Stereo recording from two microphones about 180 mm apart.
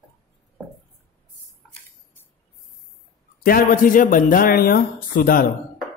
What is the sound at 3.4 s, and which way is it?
A man's voice, 50° left (ahead or behind).